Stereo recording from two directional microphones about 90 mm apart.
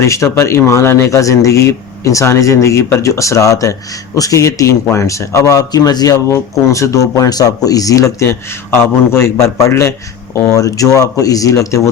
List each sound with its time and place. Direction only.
0.0 s speech: 35° left (ahead or behind)